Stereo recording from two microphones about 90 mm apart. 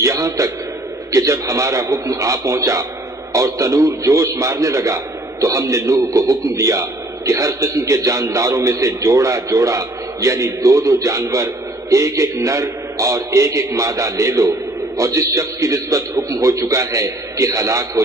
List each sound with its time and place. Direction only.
0.0 s a man's voice: 35° right (ahead or behind)